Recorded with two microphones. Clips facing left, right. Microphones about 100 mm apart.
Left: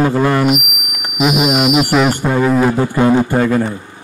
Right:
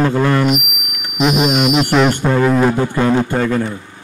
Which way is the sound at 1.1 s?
5° left (ahead or behind).